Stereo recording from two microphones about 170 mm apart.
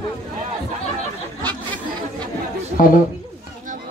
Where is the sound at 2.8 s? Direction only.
50° left (ahead or behind).